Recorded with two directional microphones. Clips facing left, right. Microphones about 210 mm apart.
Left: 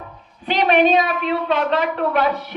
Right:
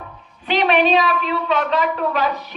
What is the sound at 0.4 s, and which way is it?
A woman's voice, 45° left (ahead or behind).